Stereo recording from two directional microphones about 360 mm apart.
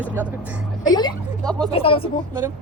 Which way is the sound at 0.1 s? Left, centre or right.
Centre.